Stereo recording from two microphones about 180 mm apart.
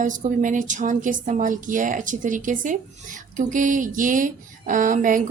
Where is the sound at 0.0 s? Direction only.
45° right (ahead or behind).